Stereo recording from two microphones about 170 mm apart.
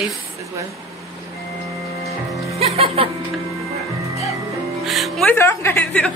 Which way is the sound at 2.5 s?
35° right (ahead or behind).